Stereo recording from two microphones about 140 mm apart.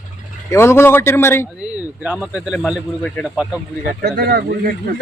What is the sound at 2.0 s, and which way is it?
Speech, 10° right (ahead or behind).